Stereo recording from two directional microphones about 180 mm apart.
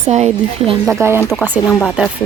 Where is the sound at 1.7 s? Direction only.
5° left (ahead or behind).